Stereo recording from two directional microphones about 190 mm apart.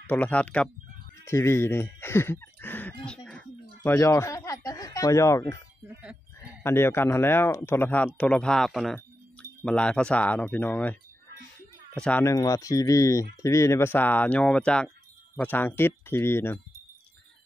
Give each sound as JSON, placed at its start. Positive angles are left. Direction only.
{"t": 0.0, "sound": "speech", "side_deg": 10}
{"t": 3.1, "sound": "a sound", "side_deg": 5}
{"t": 3.8, "sound": "speech", "side_deg": 15}
{"t": 6.6, "sound": "speech", "side_deg": 10}